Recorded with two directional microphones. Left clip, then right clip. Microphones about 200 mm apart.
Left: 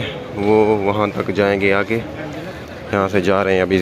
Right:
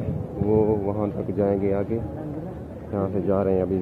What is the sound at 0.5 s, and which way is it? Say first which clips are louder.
Speech: left 8 dB; 55° left (ahead or behind).